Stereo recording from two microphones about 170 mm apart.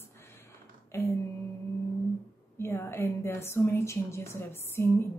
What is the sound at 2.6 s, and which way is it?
A woman's voice, 15° left (ahead or behind).